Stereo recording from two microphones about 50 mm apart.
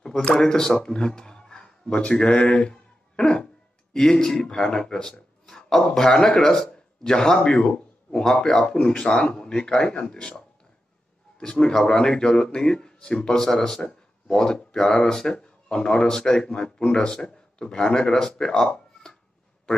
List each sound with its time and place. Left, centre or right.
0.3 s speech: centre
0.7 s a sound: centre
1.9 s speech: left